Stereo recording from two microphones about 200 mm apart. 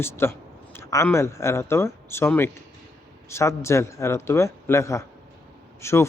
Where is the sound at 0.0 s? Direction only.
10° left (ahead or behind).